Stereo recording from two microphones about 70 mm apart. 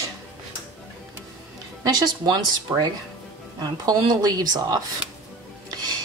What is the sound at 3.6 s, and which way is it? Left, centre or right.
A woman's voice, right.